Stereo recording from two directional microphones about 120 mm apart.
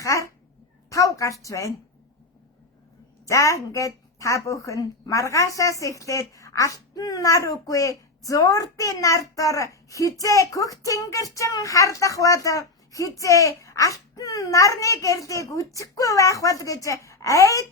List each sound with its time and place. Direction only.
0.0 s dog: 25° left (ahead or behind)
0.9 s a sound: 25° left (ahead or behind)
3.2 s a woman's voice: 25° left (ahead or behind)